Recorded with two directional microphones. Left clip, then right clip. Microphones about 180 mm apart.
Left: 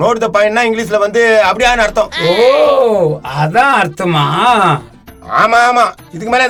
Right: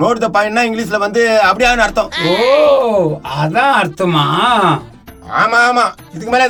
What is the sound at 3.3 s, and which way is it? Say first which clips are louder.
Speech: left 2 dB; 40° left (ahead or behind).